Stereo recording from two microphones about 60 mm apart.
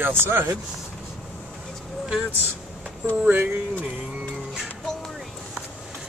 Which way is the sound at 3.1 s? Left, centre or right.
Right.